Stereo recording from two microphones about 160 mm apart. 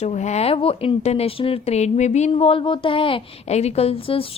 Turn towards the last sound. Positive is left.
turn(degrees=35)  # may be behind; listen again after turning